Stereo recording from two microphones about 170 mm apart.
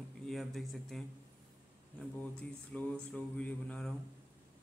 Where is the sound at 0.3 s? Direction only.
Centre (ahead or behind).